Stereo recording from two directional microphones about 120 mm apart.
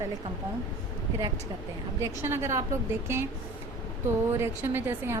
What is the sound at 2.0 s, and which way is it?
A woman's voice, 20° right (ahead or behind).